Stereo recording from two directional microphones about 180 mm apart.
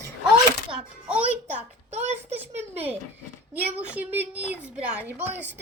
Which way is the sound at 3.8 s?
10° right (ahead or behind).